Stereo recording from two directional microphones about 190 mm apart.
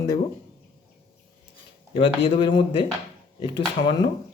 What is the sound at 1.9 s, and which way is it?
Speech, 30° left (ahead or behind).